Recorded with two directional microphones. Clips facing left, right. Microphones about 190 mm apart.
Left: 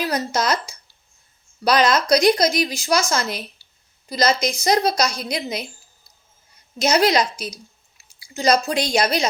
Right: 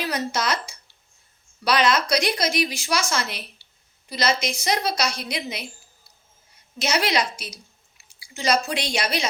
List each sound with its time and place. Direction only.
0.0 s a woman's voice: 40° left (ahead or behind)
6.7 s a woman's voice: 40° left (ahead or behind)